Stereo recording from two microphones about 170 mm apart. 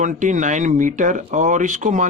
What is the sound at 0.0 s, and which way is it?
Speech, 50° right (ahead or behind).